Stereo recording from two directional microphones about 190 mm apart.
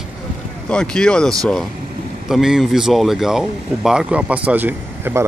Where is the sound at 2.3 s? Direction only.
Centre (ahead or behind).